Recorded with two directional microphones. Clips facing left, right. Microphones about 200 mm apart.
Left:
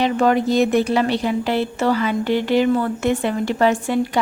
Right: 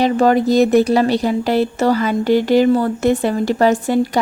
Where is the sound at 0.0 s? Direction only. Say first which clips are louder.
Right 3 dB; 40° right (ahead or behind).